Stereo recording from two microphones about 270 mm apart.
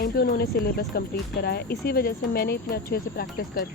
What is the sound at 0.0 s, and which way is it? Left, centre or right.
Speech, left.